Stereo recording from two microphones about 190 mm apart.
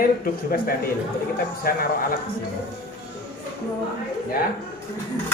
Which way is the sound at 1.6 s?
50° left (ahead or behind).